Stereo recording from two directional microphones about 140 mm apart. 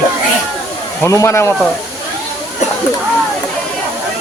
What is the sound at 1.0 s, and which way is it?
Speech, 20° left (ahead or behind).